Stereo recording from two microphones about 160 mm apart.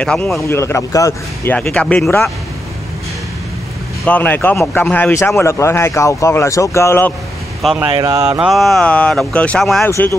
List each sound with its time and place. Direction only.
0.0 s speech: 5° left (ahead or behind)
0.4 s a man's voice: 15° left (ahead or behind)
4.0 s a man's voice: 10° left (ahead or behind)
7.6 s speech: 5° right (ahead or behind)
7.9 s speech: 25° right (ahead or behind)
8.4 s speech: centre (ahead or behind)
9.8 s a man's voice: 15° left (ahead or behind)